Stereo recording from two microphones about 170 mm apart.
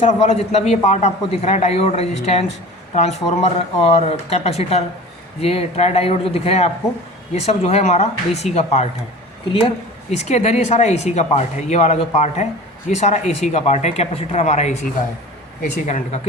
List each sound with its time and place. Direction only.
0.0 s speech: 35° left (ahead or behind)
15.9 s speech: 45° left (ahead or behind)